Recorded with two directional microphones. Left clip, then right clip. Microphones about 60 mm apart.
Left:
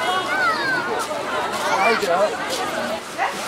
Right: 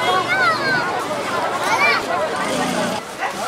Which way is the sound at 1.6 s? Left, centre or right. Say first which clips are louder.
Right 2 dB; right.